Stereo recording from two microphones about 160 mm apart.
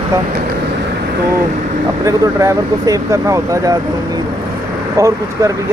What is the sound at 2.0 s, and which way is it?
Speech, 20° right (ahead or behind).